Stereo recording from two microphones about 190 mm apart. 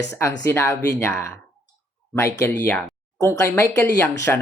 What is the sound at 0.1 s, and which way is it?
Speech, 15° left (ahead or behind).